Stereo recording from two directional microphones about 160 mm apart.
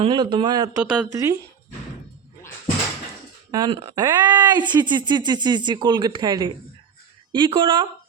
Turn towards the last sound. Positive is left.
turn(degrees=-30)  # may be behind; listen again after turning